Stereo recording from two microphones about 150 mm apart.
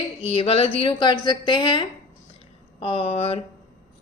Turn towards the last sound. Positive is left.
turn(degrees=40)  # may be behind; listen again after turning